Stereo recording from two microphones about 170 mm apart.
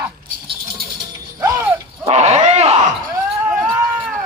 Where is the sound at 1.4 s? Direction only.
20° right (ahead or behind).